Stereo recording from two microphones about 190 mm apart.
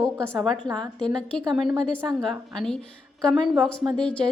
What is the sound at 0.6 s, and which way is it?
Speech, 20° right (ahead or behind).